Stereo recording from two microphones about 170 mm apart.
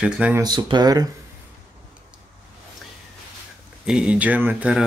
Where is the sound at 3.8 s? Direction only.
5° right (ahead or behind).